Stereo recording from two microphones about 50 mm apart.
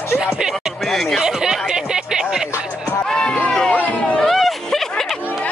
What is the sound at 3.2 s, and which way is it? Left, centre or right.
Run, centre.